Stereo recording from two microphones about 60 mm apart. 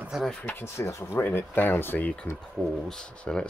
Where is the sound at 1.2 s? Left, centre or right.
Left.